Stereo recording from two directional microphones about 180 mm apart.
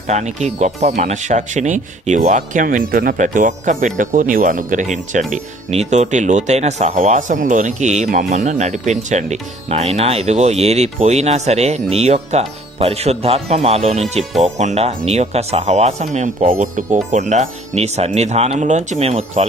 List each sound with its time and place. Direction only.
0.1 s speech: 40° right (ahead or behind)